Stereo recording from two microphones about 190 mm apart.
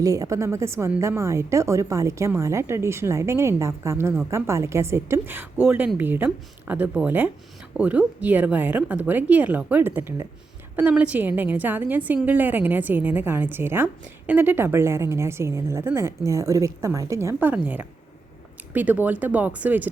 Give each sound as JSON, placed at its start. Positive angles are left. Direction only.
{"t": 0.0, "sound": "a woman's voice", "side_deg": -15}